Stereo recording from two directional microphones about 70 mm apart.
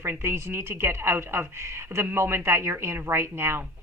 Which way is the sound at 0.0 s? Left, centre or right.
Right.